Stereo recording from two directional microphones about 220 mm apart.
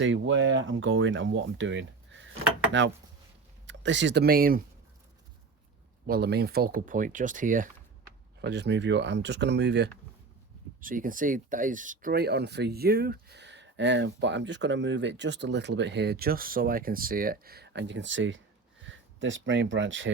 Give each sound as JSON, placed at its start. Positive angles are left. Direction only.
{"t": 0.0, "sound": "speech", "side_deg": -60}
{"t": 6.1, "sound": "speech", "side_deg": -45}
{"t": 8.4, "sound": "speech", "side_deg": -50}
{"t": 10.8, "sound": "speech", "side_deg": -40}